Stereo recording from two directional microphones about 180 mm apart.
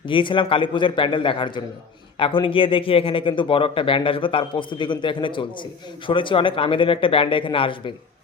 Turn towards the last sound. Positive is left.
turn(degrees=30)  # may be behind; listen again after turning